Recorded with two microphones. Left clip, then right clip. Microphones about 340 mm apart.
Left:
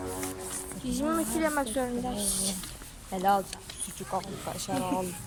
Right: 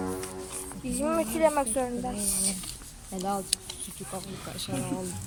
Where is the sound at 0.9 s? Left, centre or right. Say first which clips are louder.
Right 2 dB; centre.